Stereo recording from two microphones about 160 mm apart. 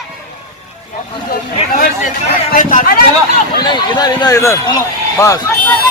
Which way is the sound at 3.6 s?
25° left (ahead or behind).